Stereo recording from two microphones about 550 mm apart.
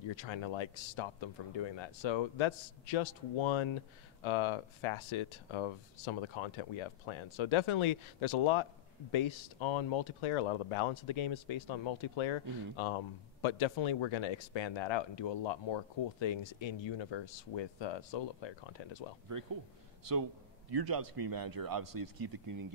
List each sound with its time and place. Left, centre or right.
0.1 s speech: left
20.7 s speech: right